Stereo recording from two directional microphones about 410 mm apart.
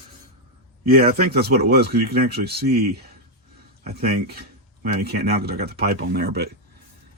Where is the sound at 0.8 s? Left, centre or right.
Right.